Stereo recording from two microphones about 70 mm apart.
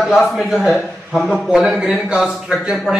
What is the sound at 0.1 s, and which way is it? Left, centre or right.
A man's voice, centre.